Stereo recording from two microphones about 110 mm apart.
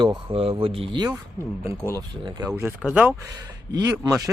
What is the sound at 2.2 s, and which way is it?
Speech, 35° right (ahead or behind).